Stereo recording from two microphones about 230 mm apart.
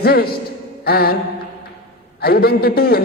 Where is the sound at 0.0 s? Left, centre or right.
Left.